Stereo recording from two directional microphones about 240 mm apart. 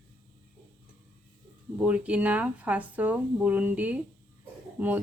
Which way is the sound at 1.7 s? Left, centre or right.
Centre.